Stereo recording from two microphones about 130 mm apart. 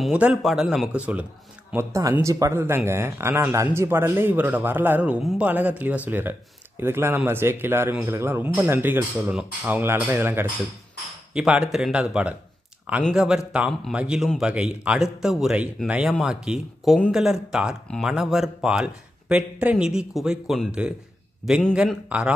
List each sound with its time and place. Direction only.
0.0 s speech: 5° right (ahead or behind)
1.7 s speech: 20° right (ahead or behind)
11.3 s speech: 5° right (ahead or behind)